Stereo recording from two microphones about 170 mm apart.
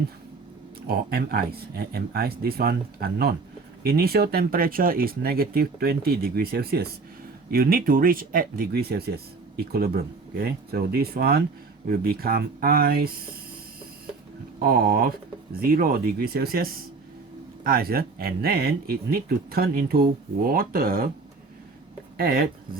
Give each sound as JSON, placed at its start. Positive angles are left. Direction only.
{"t": 0.8, "sound": "speech", "side_deg": -65}
{"t": 14.6, "sound": "speech", "side_deg": -60}
{"t": 22.2, "sound": "speech", "side_deg": -60}